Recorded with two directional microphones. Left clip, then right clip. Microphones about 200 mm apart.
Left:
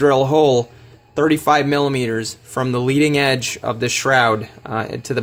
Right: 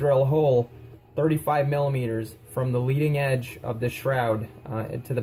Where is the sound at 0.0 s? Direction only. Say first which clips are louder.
Left 8 dB; 50° left (ahead or behind).